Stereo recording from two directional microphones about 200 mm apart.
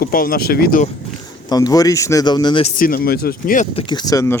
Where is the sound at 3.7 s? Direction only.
20° left (ahead or behind).